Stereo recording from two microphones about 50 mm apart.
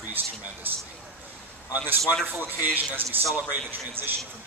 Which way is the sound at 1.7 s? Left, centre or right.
Right.